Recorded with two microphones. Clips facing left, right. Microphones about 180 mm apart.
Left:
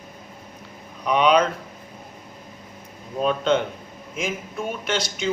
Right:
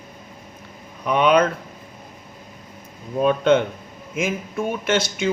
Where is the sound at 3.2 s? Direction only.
55° right (ahead or behind).